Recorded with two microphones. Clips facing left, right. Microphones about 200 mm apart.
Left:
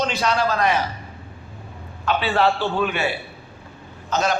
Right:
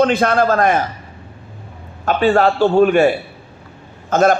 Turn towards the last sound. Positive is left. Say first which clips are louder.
# right 8 dB
turn(degrees=-50)  # may be behind; listen again after turning